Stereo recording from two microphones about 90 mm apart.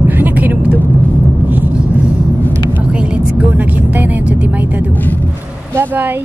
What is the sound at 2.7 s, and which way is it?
Speech, 15° right (ahead or behind).